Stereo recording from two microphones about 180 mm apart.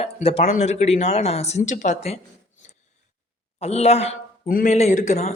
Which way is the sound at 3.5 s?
35° left (ahead or behind).